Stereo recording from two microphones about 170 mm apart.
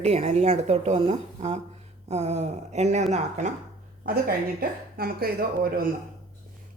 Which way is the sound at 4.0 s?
60° right (ahead or behind).